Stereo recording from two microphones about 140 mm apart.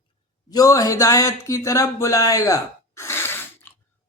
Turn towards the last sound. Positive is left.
turn(degrees=15)  # may be behind; listen again after turning